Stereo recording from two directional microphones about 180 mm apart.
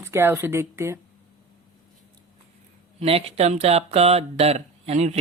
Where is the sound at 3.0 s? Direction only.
35° right (ahead or behind).